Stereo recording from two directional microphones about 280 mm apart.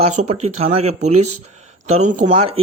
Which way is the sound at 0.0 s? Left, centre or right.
Right.